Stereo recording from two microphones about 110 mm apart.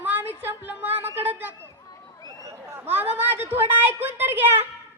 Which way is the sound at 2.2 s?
30° right (ahead or behind).